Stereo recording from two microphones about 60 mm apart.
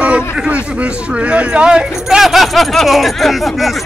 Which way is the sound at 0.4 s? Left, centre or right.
Right.